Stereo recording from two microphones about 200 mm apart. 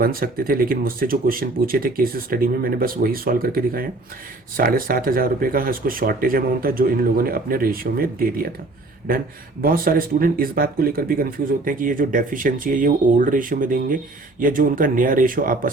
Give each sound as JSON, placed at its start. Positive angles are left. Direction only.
{"t": 0.0, "sound": "speech", "side_deg": -45}